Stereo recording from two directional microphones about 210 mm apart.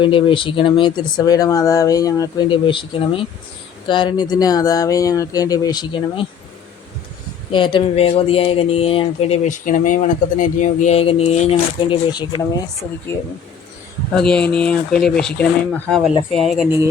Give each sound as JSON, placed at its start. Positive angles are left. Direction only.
{"t": 0.0, "sound": "speech", "side_deg": 25}
{"t": 7.5, "sound": "speech", "side_deg": 25}
{"t": 14.2, "sound": "speech", "side_deg": 5}